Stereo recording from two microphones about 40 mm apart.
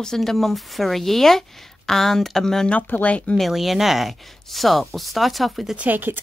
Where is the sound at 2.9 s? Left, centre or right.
Left.